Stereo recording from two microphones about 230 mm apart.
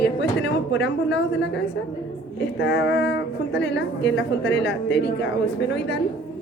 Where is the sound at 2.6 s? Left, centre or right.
Left.